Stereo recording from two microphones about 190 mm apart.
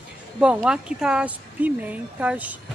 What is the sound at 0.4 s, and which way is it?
Speech, 5° right (ahead or behind).